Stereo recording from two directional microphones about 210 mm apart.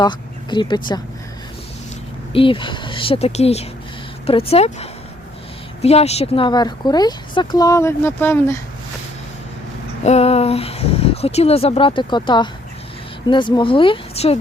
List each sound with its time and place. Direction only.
0.0 s speech: 20° left (ahead or behind)
2.3 s speech: 25° left (ahead or behind)
10.0 s speech: 30° left (ahead or behind)